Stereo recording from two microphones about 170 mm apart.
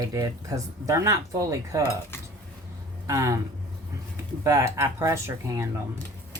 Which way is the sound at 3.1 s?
15° right (ahead or behind).